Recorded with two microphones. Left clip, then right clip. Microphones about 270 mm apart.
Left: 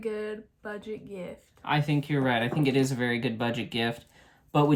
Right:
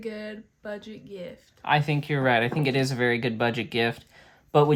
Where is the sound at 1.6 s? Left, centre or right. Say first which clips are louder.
Right 4 dB; right.